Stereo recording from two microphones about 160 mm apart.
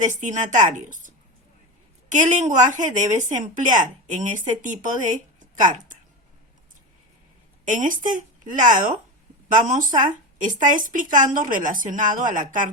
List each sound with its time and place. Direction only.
0.0 s a woman's voice: 50° right (ahead or behind)
7.6 s a woman's voice: 50° right (ahead or behind)